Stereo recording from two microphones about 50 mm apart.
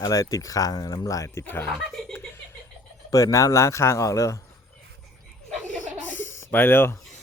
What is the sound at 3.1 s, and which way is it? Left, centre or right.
Speech, left.